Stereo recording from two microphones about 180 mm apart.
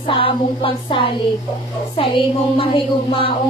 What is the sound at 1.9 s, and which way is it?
Mantra, 30° left (ahead or behind).